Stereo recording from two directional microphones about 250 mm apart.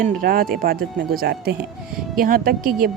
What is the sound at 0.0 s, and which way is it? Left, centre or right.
Speech, right.